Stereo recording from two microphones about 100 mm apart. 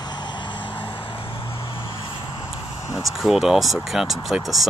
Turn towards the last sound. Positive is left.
turn(degrees=0)  # may be behind; listen again after turning